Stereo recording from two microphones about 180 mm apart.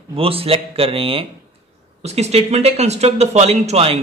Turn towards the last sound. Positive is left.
turn(degrees=-35)  # may be behind; listen again after turning